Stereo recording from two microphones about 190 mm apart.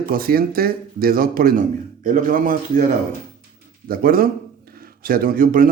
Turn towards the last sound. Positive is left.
turn(degrees=-45)  # may be behind; listen again after turning